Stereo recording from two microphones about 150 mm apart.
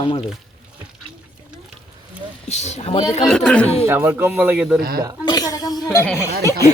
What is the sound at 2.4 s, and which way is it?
Speech, 50° left (ahead or behind).